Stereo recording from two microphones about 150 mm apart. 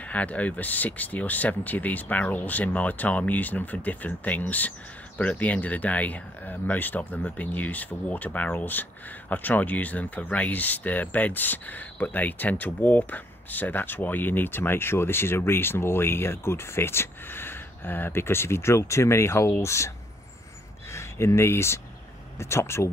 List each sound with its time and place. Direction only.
0.0 s speech: 10° left (ahead or behind)
20.9 s speech: 20° left (ahead or behind)